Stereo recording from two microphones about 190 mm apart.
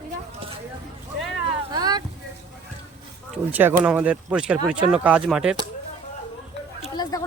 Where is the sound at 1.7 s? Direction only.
20° right (ahead or behind).